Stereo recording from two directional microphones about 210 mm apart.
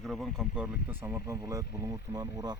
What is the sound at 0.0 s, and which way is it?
Speech, centre (ahead or behind).